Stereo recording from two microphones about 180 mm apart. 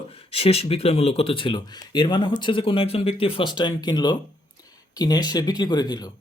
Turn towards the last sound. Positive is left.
turn(degrees=20)  # may be behind; listen again after turning